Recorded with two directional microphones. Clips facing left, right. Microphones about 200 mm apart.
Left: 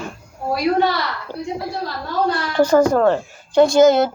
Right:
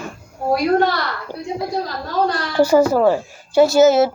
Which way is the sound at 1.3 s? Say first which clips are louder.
Right 1 dB; 20° right (ahead or behind).